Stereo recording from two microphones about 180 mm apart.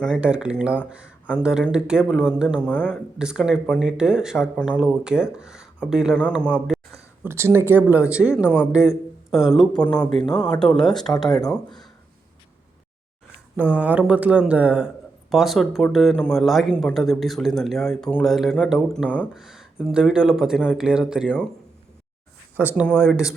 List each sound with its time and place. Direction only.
0.0 s speech: 5° right (ahead or behind)
6.7 s a sound: 5° right (ahead or behind)
7.3 s speech: 15° right (ahead or behind); by 11.1 s centre (ahead or behind)
11.3 s speech: 20° left (ahead or behind)
11.5 s speech: 5° left (ahead or behind)
13.6 s speech: 10° right (ahead or behind)
22.7 s speech: centre (ahead or behind)